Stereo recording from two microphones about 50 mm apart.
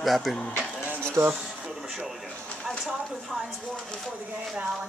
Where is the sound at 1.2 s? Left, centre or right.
Right.